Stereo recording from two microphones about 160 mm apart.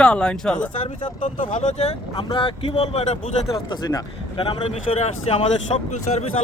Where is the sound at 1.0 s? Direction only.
45° left (ahead or behind).